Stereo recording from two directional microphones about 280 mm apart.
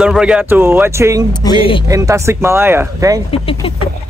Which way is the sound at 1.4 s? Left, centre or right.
Centre.